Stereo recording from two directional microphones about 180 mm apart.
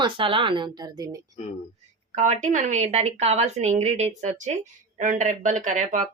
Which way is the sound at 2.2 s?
45° right (ahead or behind).